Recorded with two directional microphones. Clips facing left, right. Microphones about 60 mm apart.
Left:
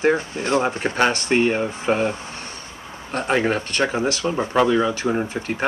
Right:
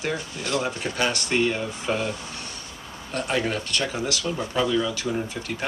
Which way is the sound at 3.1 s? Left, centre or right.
Left.